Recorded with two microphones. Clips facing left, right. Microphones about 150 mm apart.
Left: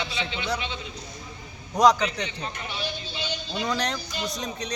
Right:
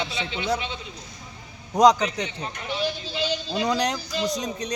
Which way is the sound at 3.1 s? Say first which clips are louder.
Right 6 dB; 90° right.